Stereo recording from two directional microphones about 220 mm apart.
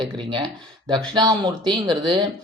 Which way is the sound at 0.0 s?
20° right (ahead or behind).